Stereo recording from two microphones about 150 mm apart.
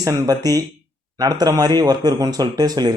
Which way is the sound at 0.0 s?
25° right (ahead or behind).